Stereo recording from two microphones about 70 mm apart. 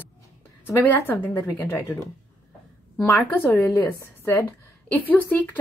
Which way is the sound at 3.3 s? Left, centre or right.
Left.